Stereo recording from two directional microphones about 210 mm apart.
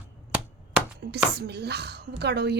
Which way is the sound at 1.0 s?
50° right (ahead or behind).